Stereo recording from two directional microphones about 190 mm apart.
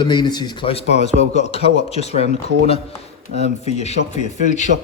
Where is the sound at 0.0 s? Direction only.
25° left (ahead or behind); by 4.7 s 40° left (ahead or behind).